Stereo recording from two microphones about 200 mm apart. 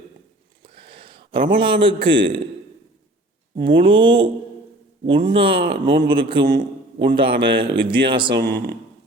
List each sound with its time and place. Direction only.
0.6 s a sound: 25° right (ahead or behind)
3.5 s a man's voice: 25° right (ahead or behind)
8.3 s speech: 55° right (ahead or behind)